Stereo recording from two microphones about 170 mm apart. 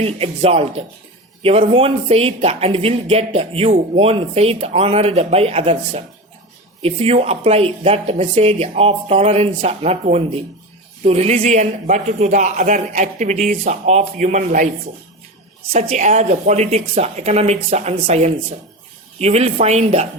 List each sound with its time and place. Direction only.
0.0 s a man's voice: 35° right (ahead or behind)
15.7 s speech: 40° right (ahead or behind)